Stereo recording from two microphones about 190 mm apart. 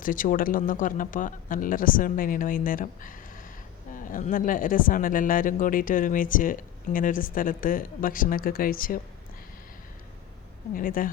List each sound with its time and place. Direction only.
0.0 s speech: 45° left (ahead or behind)
10.8 s speech: 45° left (ahead or behind)